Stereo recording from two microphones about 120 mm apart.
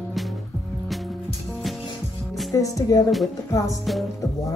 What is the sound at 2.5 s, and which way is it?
Speech, 30° left (ahead or behind).